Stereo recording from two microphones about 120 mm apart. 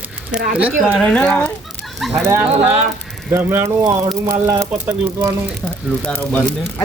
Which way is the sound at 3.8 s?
35° right (ahead or behind).